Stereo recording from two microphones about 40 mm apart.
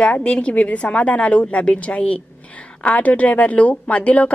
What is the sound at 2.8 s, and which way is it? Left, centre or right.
A woman's voice, left.